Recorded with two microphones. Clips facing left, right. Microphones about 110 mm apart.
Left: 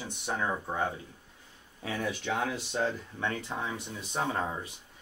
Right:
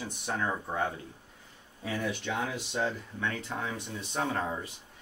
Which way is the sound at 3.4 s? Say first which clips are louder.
Even; 5° left (ahead or behind).